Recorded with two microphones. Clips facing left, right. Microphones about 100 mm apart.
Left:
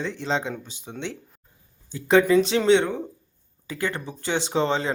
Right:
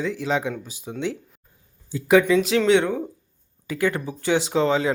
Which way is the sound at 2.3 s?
Centre (ahead or behind).